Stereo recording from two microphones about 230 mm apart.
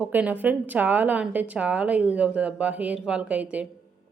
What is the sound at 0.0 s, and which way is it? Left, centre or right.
A woman's voice, centre.